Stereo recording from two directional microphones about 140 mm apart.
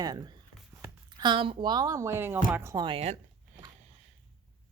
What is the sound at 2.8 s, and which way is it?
Speech, 40° right (ahead or behind).